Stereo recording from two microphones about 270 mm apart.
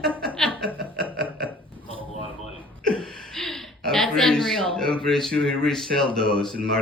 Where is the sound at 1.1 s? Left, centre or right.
Centre.